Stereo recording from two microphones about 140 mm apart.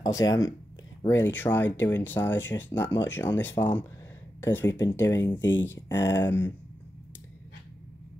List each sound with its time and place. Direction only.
0.0 s speech: 25° left (ahead or behind)